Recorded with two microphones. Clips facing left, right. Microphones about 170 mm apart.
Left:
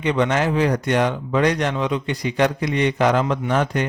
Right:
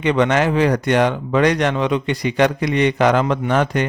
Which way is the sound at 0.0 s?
75° right (ahead or behind).